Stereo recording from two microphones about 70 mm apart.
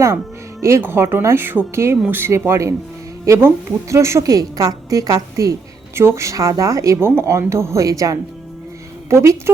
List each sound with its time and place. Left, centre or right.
0.6 s speech: right
4.3 s a woman's voice: right
5.9 s speech: right
6.3 s a woman's voice: right